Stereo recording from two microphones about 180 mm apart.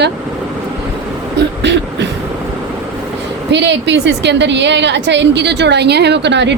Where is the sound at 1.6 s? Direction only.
75° right (ahead or behind).